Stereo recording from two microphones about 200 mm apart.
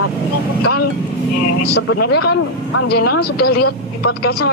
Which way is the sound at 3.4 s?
50° left (ahead or behind).